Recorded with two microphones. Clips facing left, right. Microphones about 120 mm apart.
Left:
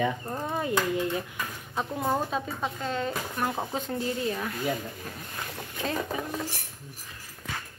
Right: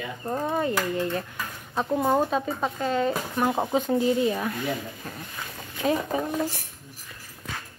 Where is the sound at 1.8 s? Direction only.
25° right (ahead or behind).